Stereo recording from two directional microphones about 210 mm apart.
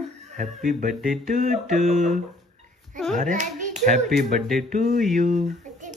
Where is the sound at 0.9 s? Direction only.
Centre (ahead or behind).